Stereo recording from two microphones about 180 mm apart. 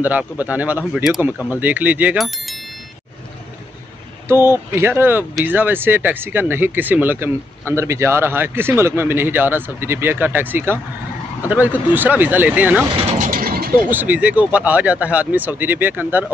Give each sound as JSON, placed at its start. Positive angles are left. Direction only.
{"t": 0.0, "sound": "speech", "side_deg": -10}
{"t": 4.3, "sound": "speech", "side_deg": -15}
{"t": 13.2, "sound": "mechanisms", "side_deg": -50}
{"t": 13.8, "sound": "speech", "side_deg": -10}